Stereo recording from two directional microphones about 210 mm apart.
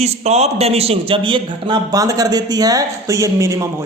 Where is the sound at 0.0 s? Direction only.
30° right (ahead or behind).